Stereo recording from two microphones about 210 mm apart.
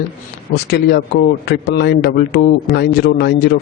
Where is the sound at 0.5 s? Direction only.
50° left (ahead or behind).